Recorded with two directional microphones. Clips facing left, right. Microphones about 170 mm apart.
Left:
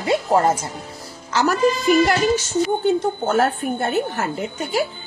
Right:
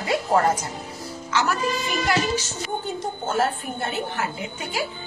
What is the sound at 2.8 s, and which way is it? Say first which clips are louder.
A woman's voice: left 10 dB; 65° left (ahead or behind).